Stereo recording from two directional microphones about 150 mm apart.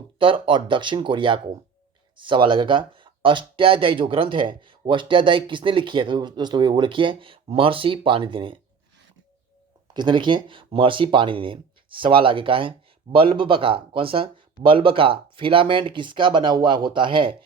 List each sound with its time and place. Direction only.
0.2 s speech: 35° right (ahead or behind)
9.9 s speech: 30° right (ahead or behind)